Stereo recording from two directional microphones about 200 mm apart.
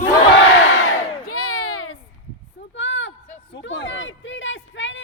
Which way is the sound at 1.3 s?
90° left.